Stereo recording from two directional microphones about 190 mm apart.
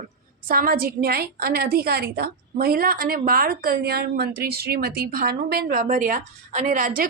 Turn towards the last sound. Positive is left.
turn(degrees=-45)  # may be behind; listen again after turning